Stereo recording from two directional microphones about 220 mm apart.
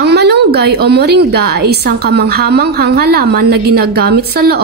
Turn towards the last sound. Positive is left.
turn(degrees=-45)  # may be behind; listen again after turning